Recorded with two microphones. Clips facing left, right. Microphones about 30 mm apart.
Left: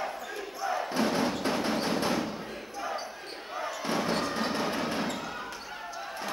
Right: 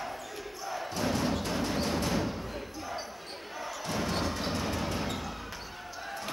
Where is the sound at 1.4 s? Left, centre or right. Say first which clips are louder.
Left 3 dB; left.